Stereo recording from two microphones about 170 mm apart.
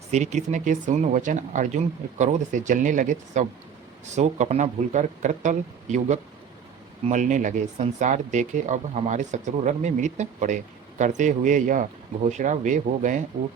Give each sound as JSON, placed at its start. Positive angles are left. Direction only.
{"t": 0.1, "sound": "speech", "side_deg": -45}